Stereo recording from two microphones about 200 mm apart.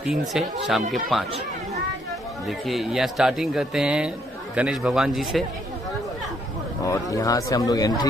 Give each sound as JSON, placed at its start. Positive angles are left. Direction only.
{"t": 0.3, "sound": "speech", "side_deg": 0}
{"t": 2.4, "sound": "speech", "side_deg": 0}
{"t": 6.8, "sound": "speech", "side_deg": 15}